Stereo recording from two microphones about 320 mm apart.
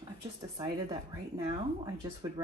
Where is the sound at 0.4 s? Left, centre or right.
Centre.